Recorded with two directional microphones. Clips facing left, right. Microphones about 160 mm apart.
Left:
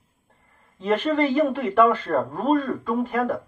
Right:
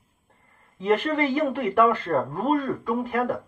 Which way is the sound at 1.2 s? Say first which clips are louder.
Left 3 dB; 10° right (ahead or behind).